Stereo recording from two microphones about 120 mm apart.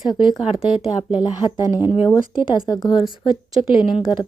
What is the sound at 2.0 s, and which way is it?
Speech, 35° left (ahead or behind).